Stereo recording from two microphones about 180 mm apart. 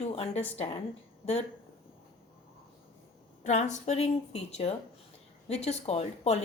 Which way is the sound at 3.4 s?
40° left (ahead or behind).